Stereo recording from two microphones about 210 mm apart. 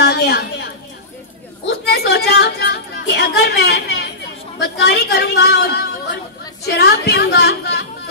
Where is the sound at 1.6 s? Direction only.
50° left (ahead or behind).